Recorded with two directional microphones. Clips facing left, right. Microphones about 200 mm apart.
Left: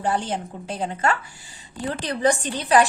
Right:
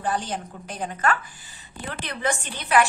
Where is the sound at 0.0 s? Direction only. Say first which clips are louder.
Left 3 dB; 25° left (ahead or behind).